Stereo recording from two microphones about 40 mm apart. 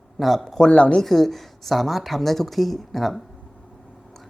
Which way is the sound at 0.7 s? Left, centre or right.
Left.